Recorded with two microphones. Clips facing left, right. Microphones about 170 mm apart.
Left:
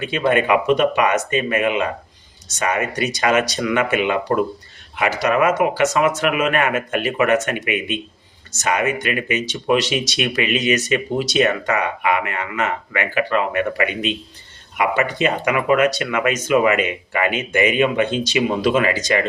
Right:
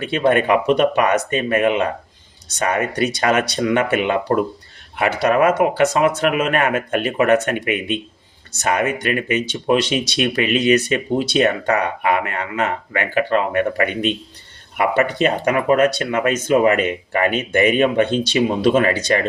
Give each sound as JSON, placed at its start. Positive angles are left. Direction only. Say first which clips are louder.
{"t": 0.0, "sound": "speech", "louder": "right 2 dB", "side_deg": -35}
{"t": 8.5, "sound": "speech", "louder": "right 1 dB", "side_deg": -35}